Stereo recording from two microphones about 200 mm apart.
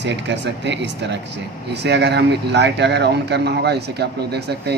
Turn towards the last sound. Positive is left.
turn(degrees=-55)  # may be behind; listen again after turning